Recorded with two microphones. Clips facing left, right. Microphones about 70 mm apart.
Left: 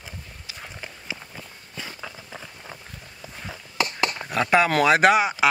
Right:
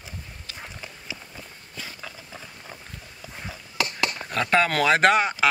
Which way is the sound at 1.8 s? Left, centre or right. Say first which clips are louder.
Left 2 dB; left.